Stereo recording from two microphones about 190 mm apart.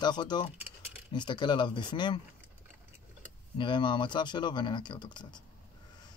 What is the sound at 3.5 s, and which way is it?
Speech, 25° left (ahead or behind).